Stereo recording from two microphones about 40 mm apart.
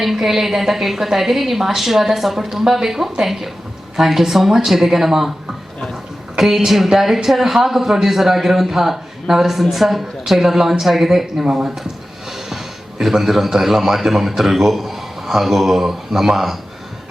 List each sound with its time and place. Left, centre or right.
0.0 s a woman's voice: centre
6.3 s a woman's voice: centre